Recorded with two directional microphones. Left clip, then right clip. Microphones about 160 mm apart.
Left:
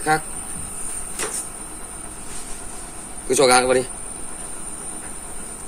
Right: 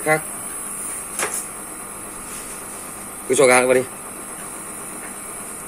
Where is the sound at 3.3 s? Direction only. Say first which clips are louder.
Right 1 dB; 5° left (ahead or behind).